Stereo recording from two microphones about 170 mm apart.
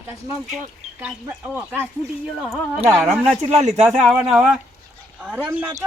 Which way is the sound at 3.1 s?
40° right (ahead or behind).